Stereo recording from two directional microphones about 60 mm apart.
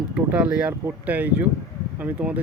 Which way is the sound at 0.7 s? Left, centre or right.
Right.